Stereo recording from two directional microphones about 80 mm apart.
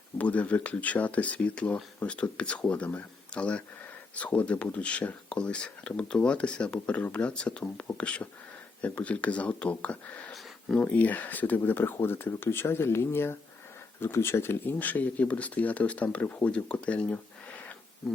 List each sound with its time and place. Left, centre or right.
0.2 s speech: centre
10.3 s a sound: centre
10.8 s speech: centre